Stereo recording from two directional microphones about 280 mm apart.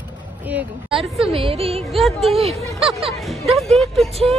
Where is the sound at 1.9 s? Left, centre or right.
Centre.